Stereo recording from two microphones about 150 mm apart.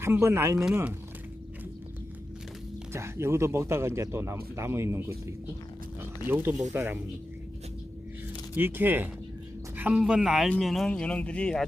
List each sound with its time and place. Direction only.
0.0 s speech: 20° right (ahead or behind)
2.9 s speech: 20° right (ahead or behind)
8.5 s speech: 15° right (ahead or behind); by 11.6 s 5° left (ahead or behind)